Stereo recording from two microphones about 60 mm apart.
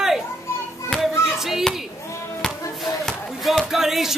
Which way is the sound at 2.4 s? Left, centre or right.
Centre.